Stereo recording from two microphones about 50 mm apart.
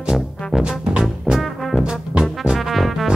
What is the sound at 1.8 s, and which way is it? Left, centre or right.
Brass instrument, centre.